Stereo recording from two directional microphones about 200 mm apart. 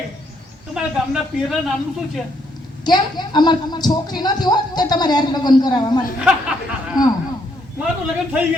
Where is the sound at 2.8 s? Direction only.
20° left (ahead or behind).